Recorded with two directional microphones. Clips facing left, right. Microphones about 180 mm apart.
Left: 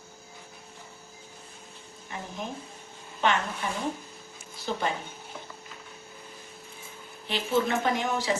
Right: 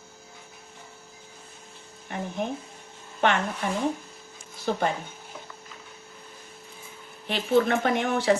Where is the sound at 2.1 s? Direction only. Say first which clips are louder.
Right 6 dB; 60° right (ahead or behind).